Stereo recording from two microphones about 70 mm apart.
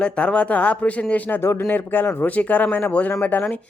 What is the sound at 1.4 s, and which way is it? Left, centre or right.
Speech, left.